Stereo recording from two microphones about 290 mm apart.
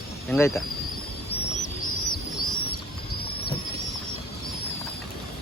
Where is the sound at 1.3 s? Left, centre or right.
Left.